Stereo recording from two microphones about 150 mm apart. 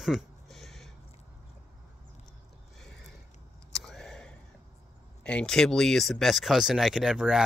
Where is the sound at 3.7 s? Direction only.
5° left (ahead or behind).